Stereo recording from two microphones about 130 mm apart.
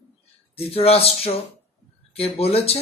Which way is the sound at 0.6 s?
50° left (ahead or behind).